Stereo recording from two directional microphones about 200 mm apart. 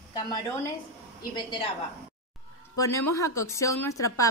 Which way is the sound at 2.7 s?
15° left (ahead or behind).